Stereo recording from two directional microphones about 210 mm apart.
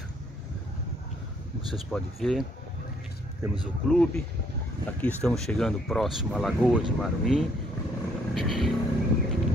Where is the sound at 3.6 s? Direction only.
5° left (ahead or behind).